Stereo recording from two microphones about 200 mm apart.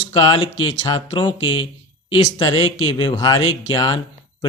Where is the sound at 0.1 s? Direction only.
25° left (ahead or behind).